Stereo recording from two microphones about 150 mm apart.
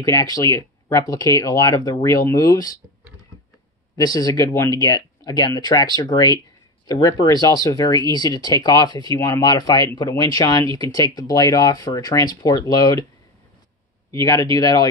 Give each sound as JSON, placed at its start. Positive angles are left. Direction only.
{"t": 0.0, "sound": "speech", "side_deg": 25}
{"t": 3.9, "sound": "speech", "side_deg": 25}
{"t": 14.1, "sound": "speech", "side_deg": 25}